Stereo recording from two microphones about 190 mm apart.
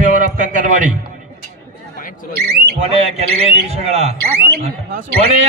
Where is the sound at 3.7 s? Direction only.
35° right (ahead or behind).